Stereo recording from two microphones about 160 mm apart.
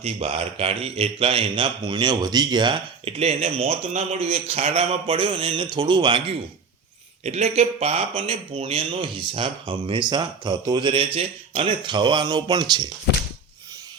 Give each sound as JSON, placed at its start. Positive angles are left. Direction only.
{"t": 0.0, "sound": "speech", "side_deg": -40}
{"t": 7.3, "sound": "speech", "side_deg": -40}